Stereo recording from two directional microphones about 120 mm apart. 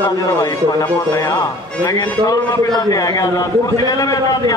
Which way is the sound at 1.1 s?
30° left (ahead or behind).